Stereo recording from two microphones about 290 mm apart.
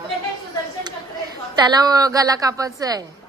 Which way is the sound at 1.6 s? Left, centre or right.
Centre.